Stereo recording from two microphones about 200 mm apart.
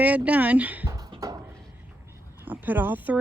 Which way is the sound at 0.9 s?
20° right (ahead or behind).